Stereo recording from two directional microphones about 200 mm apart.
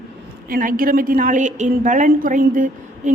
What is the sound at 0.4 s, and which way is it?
A woman's voice, 45° right (ahead or behind).